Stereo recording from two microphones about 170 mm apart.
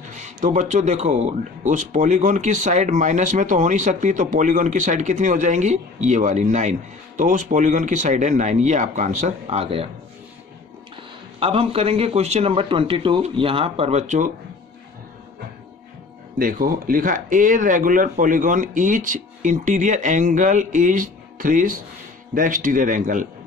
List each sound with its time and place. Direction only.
0.1 s speech: 45° right (ahead or behind)
11.3 s a man's voice: 35° right (ahead or behind)
16.3 s speech: 55° right (ahead or behind)